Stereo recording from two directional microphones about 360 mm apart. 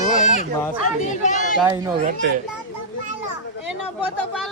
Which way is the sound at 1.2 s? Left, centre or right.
Centre.